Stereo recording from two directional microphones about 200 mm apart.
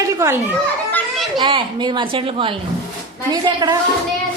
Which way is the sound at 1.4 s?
25° right (ahead or behind).